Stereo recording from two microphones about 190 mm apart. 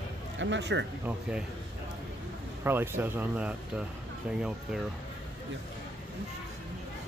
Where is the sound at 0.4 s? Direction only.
70° right (ahead or behind).